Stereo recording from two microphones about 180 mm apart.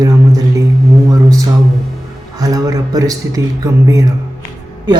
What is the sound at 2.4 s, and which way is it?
Speech, 20° right (ahead or behind).